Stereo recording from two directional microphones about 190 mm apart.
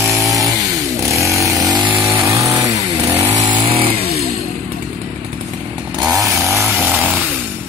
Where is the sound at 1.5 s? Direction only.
Centre (ahead or behind).